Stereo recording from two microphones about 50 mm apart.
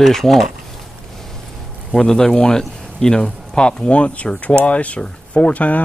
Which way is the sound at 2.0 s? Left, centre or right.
Centre.